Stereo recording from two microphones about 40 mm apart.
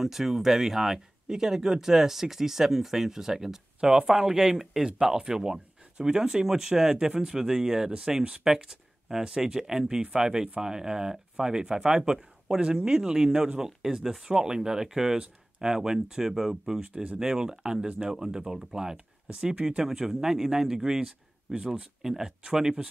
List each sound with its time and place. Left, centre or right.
0.0 s speech: centre
16.8 s speech: right
17.2 s speech: centre